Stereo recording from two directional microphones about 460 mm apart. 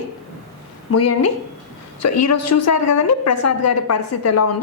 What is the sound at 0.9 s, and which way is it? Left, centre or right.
A woman's voice, left.